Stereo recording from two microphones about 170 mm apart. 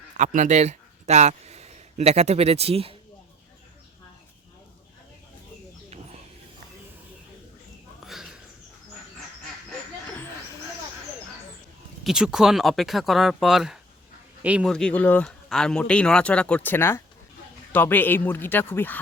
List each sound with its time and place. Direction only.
0.2 s a man's voice: 45° right (ahead or behind)
8.0 s a sound: centre (ahead or behind)
12.0 s a man's voice: 5° right (ahead or behind)
14.7 s speech: 5° left (ahead or behind)